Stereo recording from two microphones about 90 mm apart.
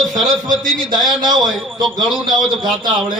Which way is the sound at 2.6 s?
55° right (ahead or behind).